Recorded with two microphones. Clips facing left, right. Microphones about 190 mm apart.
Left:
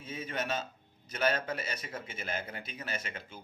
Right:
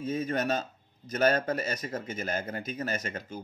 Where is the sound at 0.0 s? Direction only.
45° right (ahead or behind).